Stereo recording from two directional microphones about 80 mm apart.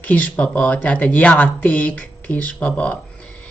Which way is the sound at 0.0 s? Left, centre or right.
Centre.